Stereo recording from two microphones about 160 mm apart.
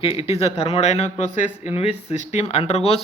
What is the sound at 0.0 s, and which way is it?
Speech, 40° left (ahead or behind).